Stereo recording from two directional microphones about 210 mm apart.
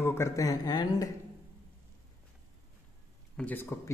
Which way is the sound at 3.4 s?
10° left (ahead or behind).